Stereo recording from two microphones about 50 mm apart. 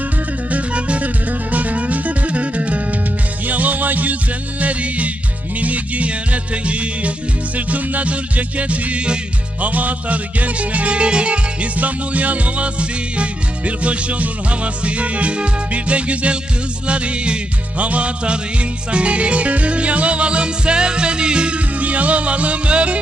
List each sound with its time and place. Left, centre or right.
0.5 s music: right